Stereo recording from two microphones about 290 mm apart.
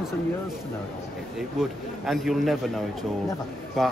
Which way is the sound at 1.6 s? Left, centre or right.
Centre.